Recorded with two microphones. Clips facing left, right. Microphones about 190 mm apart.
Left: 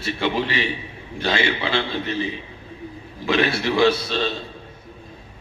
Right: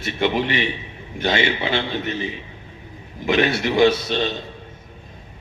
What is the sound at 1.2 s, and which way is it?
Speech, 20° right (ahead or behind).